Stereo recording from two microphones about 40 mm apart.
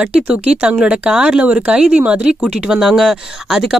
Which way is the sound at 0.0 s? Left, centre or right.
Right.